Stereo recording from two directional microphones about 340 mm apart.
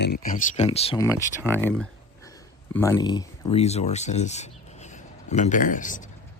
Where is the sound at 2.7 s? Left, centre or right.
Centre.